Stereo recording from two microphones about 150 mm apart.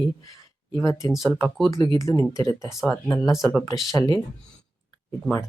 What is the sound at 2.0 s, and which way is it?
Speech, 20° left (ahead or behind).